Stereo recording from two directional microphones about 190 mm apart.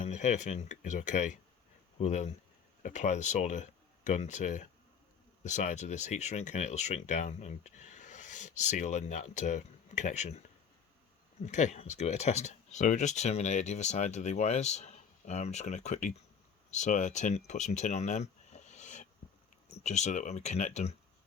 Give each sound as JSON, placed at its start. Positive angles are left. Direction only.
{"t": 0.0, "sound": "speech", "side_deg": 35}
{"t": 11.4, "sound": "speech", "side_deg": 40}